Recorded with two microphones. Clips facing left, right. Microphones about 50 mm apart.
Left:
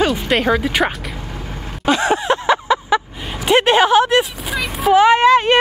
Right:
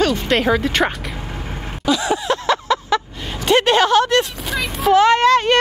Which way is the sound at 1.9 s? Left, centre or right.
Left.